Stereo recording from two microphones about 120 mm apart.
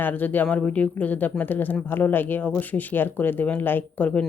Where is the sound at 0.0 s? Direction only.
15° left (ahead or behind).